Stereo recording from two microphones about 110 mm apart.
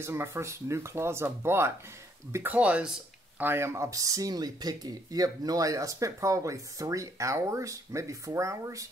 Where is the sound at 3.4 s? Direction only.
20° right (ahead or behind).